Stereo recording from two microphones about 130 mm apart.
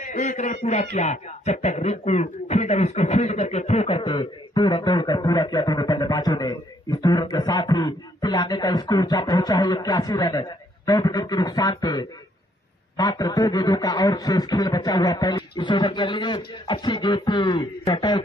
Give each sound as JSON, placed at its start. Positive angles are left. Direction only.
{"t": 0.0, "sound": "speech", "side_deg": 70}